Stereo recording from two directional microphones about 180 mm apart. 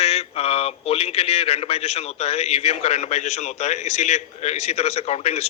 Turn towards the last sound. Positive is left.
turn(degrees=35)  # may be behind; listen again after turning